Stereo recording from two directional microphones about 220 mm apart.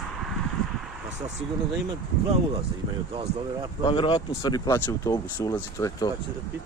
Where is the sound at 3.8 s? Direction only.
25° left (ahead or behind).